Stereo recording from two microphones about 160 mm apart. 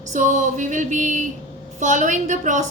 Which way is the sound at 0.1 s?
50° right (ahead or behind).